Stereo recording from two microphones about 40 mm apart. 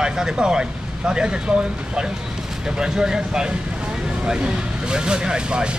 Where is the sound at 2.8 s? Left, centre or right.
Centre.